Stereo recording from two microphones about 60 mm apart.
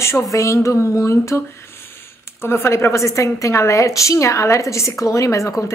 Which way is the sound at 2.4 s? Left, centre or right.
Left.